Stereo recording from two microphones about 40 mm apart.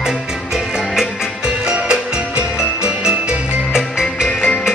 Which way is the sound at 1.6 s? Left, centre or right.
Right.